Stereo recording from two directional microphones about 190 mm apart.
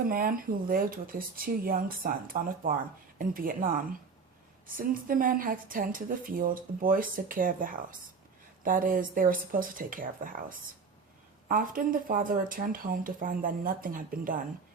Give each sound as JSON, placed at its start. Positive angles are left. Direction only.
{"t": 0.1, "sound": "speech", "side_deg": -50}